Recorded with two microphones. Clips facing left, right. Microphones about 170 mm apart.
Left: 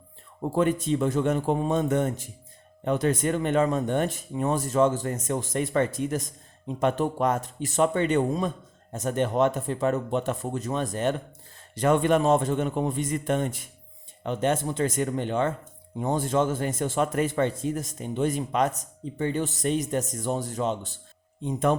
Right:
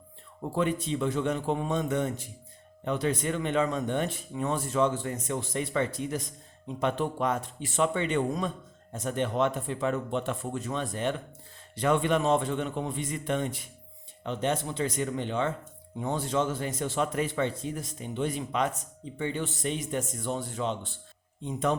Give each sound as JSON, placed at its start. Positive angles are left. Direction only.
{"t": 0.5, "sound": "a man's voice", "side_deg": 45}